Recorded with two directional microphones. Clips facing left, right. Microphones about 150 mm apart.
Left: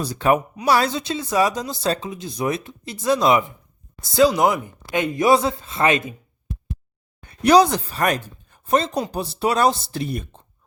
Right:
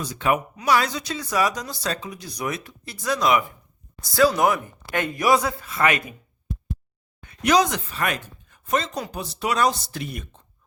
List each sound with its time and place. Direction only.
0.0 s speech: 35° left (ahead or behind)
7.2 s speech: 35° left (ahead or behind)